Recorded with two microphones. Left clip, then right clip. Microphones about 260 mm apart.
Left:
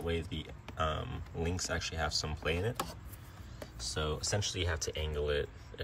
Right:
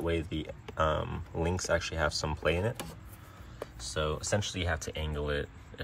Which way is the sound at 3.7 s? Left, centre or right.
Centre.